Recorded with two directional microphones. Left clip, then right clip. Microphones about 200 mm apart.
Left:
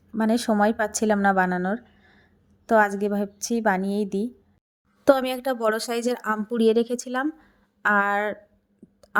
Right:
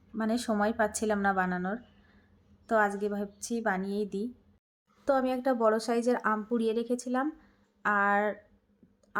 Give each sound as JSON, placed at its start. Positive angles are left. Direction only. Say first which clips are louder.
{"t": 0.2, "sound": "a woman's voice", "louder": "left 8 dB", "side_deg": 35}